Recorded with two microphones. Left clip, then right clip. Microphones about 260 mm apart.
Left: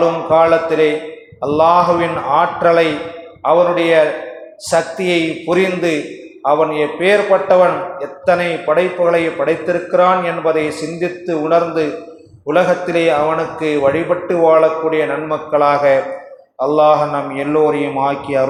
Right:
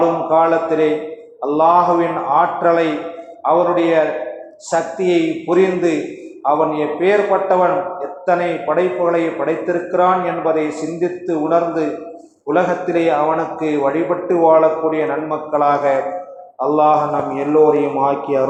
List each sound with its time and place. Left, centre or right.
0.3 s a man's voice: left